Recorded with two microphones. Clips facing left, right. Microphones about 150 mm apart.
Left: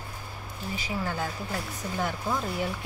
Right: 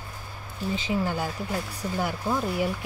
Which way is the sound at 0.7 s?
25° right (ahead or behind).